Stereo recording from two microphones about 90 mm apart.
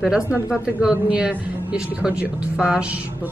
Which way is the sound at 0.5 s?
10° right (ahead or behind).